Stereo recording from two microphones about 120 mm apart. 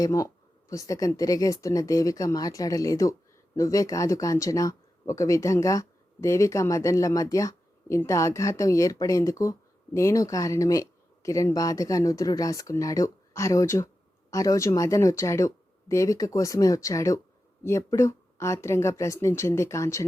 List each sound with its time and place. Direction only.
0.0 s speech: 30° left (ahead or behind)